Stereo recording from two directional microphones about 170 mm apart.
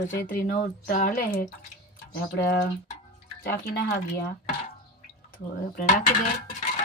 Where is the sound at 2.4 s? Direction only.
70° left (ahead or behind).